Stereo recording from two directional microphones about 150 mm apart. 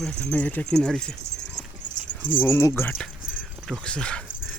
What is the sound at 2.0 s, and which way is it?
Keys jangling, 60° left (ahead or behind).